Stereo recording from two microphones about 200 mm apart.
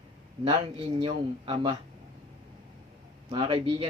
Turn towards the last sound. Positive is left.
turn(degrees=-25)  # may be behind; listen again after turning